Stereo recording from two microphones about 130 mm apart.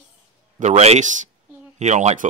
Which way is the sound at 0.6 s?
60° right (ahead or behind).